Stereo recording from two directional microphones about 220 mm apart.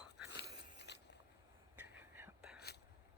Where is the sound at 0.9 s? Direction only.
50° left (ahead or behind).